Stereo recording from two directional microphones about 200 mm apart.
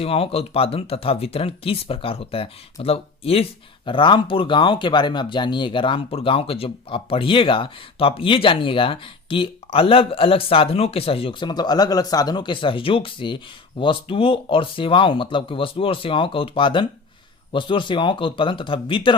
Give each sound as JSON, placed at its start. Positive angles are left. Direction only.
{"t": 0.0, "sound": "speech", "side_deg": 30}